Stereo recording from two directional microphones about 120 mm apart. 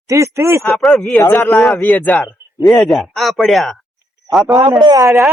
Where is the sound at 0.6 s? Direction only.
Centre (ahead or behind).